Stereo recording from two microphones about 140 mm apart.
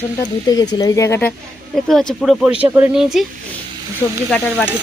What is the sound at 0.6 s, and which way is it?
Speech, 25° left (ahead or behind).